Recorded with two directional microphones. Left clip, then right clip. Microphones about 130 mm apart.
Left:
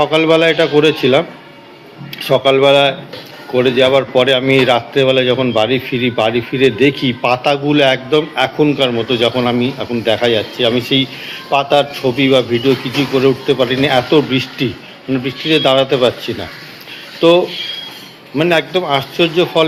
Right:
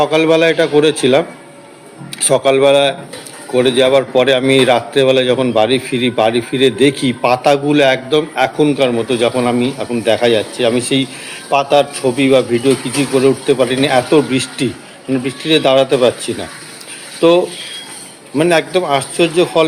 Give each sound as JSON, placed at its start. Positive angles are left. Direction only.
{"t": 0.0, "sound": "a man's voice", "side_deg": -20}
{"t": 2.2, "sound": "a man's voice", "side_deg": -20}